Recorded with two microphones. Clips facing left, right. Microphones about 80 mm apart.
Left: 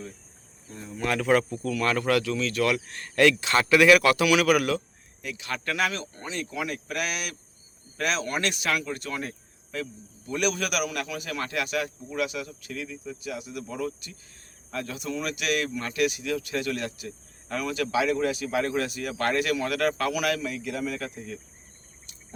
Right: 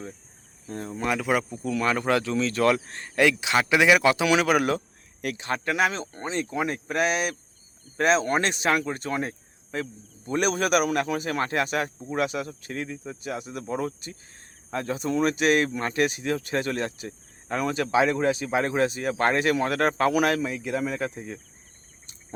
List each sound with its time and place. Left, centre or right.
0.7 s speech: right
1.0 s speech: centre
1.5 s speech: right
5.2 s speech: right
5.6 s speech: right